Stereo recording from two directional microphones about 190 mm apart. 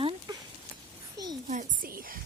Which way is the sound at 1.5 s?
45° right (ahead or behind).